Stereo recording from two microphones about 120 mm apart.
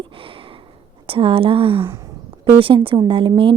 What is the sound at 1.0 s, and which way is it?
A woman's voice, 50° right (ahead or behind).